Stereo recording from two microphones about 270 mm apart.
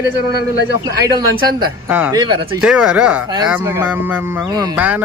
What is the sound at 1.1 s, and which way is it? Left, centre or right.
Speech, centre.